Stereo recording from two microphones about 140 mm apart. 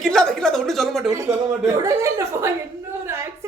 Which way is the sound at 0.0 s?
5° left (ahead or behind).